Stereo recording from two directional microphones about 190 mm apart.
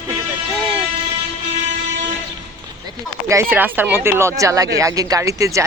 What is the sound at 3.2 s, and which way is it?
Speech, 15° right (ahead or behind).